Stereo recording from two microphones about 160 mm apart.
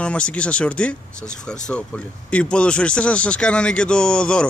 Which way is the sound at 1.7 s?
5° left (ahead or behind).